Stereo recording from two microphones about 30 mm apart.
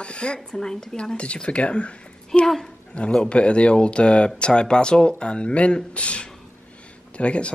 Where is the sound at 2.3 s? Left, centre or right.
Centre.